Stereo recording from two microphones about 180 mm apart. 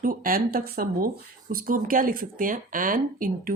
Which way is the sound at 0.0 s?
50° right (ahead or behind).